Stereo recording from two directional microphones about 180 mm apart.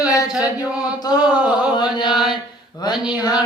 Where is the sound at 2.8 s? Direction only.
25° left (ahead or behind).